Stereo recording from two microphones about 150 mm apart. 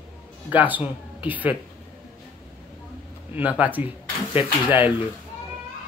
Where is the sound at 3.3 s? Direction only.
10° right (ahead or behind).